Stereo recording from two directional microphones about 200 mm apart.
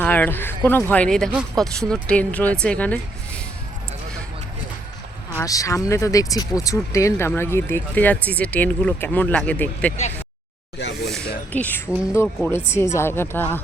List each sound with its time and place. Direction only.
0.0 s speech: 10° left (ahead or behind)
5.4 s speech: 15° left (ahead or behind)
10.8 s a sound: 60° left (ahead or behind)
11.5 s speech: 10° left (ahead or behind)